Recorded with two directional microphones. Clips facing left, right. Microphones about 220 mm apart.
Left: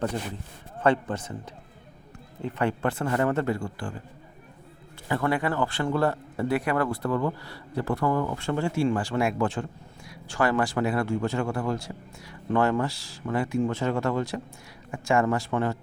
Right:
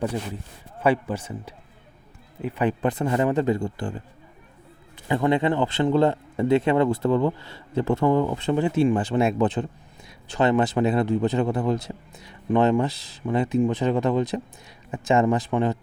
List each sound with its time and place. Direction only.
0.8 s a man's voice: 10° right (ahead or behind)
5.0 s a man's voice: 20° right (ahead or behind)